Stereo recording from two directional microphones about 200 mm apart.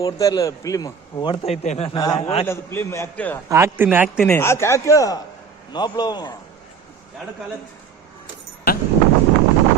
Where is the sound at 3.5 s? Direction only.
10° right (ahead or behind).